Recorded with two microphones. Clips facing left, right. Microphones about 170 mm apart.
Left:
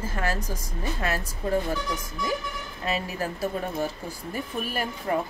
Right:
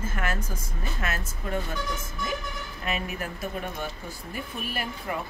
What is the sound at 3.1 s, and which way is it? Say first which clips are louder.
Speech: left 4 dB; 35° left (ahead or behind).